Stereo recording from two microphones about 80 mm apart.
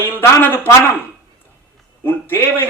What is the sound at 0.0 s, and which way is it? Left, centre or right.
Speech, left.